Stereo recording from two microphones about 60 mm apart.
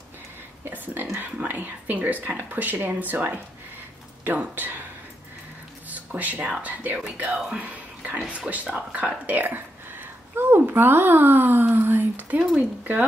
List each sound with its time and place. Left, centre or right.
0.7 s speech: right
1.2 s speech: right
5.9 s a sound: right
6.6 s speech: right
7.4 s music: right
8.3 s speech: right